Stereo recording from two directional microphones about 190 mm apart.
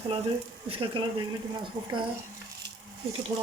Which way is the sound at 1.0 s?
25° right (ahead or behind).